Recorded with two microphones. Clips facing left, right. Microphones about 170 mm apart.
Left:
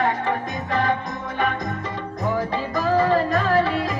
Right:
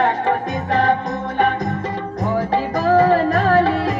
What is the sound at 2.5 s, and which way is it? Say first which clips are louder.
Music: right 5 dB; 45° right (ahead or behind).